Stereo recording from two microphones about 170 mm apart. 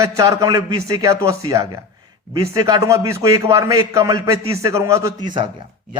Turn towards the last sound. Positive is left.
turn(degrees=-25)  # may be behind; listen again after turning